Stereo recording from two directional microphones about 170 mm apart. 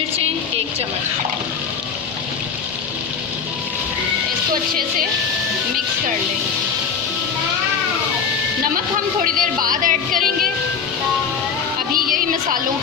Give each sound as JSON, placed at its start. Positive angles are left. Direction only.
{"t": 9.2, "sound": "speech", "side_deg": -55}
{"t": 12.0, "sound": "music", "side_deg": -55}